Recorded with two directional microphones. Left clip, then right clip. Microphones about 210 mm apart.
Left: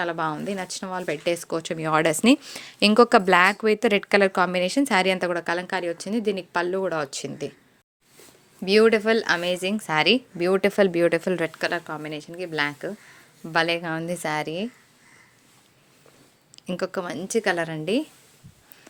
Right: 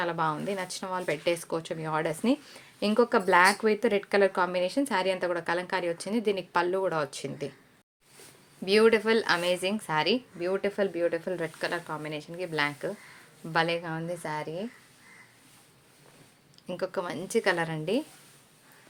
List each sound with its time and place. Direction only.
0.0 s speech: 25° left (ahead or behind)
8.6 s a woman's voice: 25° left (ahead or behind); by 14.7 s 40° left (ahead or behind)
16.6 s speech: 35° left (ahead or behind)